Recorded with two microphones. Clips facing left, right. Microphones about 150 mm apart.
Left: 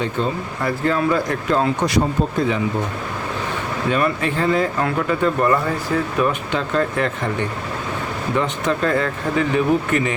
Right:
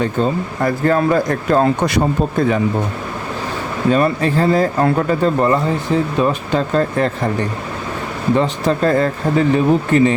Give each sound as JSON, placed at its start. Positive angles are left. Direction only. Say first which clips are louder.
{"t": 0.0, "sound": "speech", "louder": "right 5 dB", "side_deg": -45}
{"t": 3.9, "sound": "speech", "louder": "right 5 dB", "side_deg": -35}
{"t": 6.5, "sound": "speech", "louder": "right 4 dB", "side_deg": -40}
{"t": 8.4, "sound": "speech", "louder": "right 3 dB", "side_deg": -35}